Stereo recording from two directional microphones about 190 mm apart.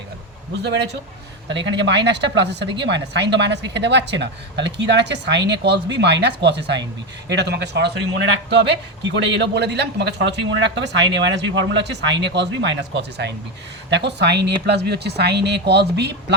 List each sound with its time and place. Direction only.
0.6 s speech: 65° right (ahead or behind)